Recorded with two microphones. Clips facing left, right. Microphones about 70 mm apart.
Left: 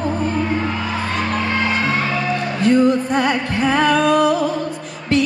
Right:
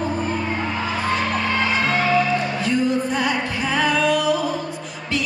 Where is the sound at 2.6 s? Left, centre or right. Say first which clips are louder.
Left 10 dB; left.